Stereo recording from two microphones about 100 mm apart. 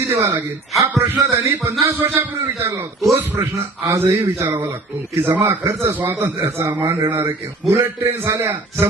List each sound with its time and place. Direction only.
0.0 s a man's voice: 25° right (ahead or behind)